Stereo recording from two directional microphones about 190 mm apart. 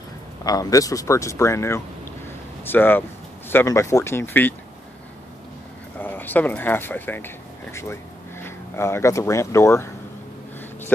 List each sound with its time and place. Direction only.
0.4 s speech: 20° left (ahead or behind)
5.9 s speech: 10° left (ahead or behind)